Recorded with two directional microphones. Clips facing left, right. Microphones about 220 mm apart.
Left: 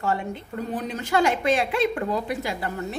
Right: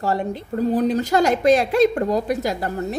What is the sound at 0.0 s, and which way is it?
A woman's voice, 35° right (ahead or behind).